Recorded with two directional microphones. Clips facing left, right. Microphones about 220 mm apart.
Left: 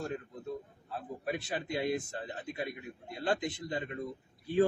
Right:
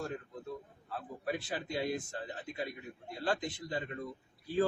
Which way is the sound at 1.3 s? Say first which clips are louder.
Left 1 dB; 20° left (ahead or behind).